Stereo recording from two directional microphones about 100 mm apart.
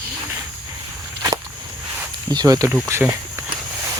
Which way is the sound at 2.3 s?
40° right (ahead or behind).